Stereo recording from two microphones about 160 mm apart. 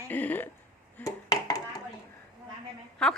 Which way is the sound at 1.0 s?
20° left (ahead or behind).